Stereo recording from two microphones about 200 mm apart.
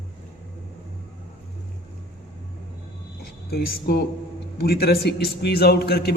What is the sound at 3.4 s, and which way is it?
A man's voice, 50° left (ahead or behind).